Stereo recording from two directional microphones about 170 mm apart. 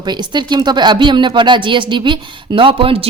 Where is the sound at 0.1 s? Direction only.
25° right (ahead or behind).